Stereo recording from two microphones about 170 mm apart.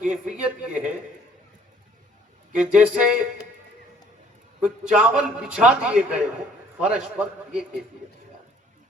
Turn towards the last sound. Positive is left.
turn(degrees=-5)  # may be behind; listen again after turning